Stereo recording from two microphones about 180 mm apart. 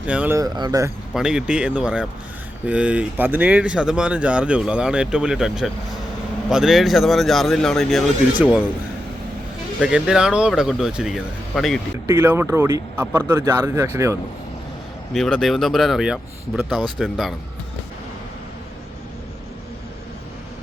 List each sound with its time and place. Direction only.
0.0 s speech: 5° right (ahead or behind)
0.3 s speech: 20° right (ahead or behind)
1.1 s speech: 5° right (ahead or behind)
9.8 s speech: 5° right (ahead or behind)
12.0 s speech: 10° right (ahead or behind)
15.1 s speech: centre (ahead or behind)